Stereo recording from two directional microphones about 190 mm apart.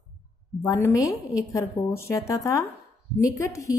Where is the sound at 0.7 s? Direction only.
15° left (ahead or behind).